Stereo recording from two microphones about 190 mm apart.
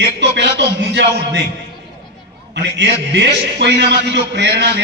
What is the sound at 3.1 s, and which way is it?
A man's voice, 65° right (ahead or behind).